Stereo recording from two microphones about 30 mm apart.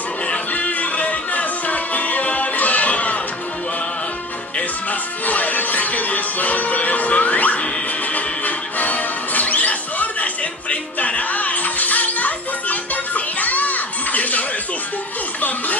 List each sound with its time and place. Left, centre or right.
0.3 s music: left
5.2 s music: left